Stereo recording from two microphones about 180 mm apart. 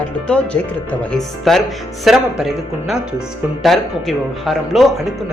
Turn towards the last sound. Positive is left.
turn(degrees=0)  # may be behind; listen again after turning